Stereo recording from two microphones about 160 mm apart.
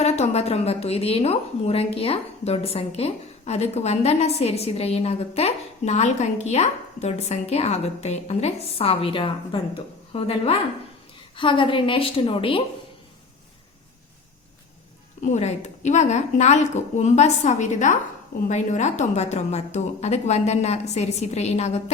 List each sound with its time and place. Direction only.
0.0 s a woman's voice: 40° left (ahead or behind)
15.3 s a woman's voice: 45° left (ahead or behind)